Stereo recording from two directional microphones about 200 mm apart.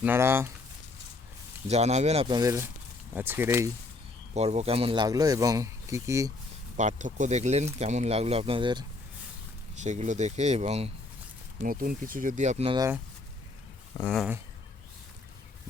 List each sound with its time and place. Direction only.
0.0 s speech: 10° right (ahead or behind)
1.6 s speech: 35° right (ahead or behind); by 3.7 s 10° right (ahead or behind)
4.4 s speech: 30° right (ahead or behind); by 6.3 s 15° right (ahead or behind)
6.7 s speech: 40° right (ahead or behind)
9.8 s speech: 35° right (ahead or behind)
11.6 s speech: 45° right (ahead or behind); by 12.8 s 30° right (ahead or behind)
14.0 s speech: 5° left (ahead or behind)